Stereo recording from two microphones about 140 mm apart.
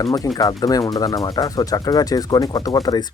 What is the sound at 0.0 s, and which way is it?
Speech, 25° left (ahead or behind).